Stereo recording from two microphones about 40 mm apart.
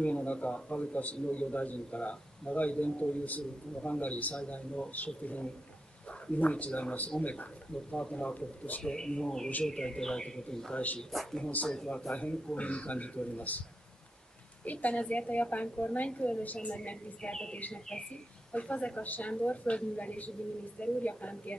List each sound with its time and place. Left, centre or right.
0.0 s a man's voice: left
8.4 s a man's voice: left
8.8 s speech: centre
11.1 s a woman's voice: centre
11.7 s a woman's voice: centre
12.1 s a man's voice: left
14.6 s a man's voice: left
18.5 s a man's voice: left